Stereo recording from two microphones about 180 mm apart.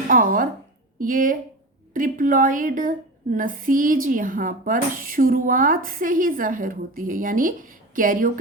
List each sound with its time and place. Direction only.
0.1 s speech: 50° right (ahead or behind)